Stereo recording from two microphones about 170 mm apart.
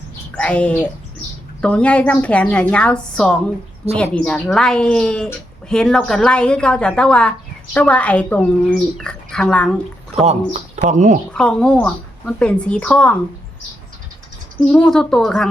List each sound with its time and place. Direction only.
0.3 s a woman's voice: 5° left (ahead or behind)
10.2 s speech: 40° right (ahead or behind)
11.3 s speech: 5° left (ahead or behind)
14.6 s speech: 5° left (ahead or behind)